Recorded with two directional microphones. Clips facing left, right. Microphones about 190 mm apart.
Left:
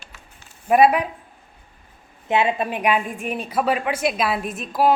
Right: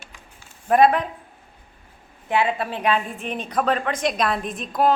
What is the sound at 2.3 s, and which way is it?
A woman's voice, 20° left (ahead or behind).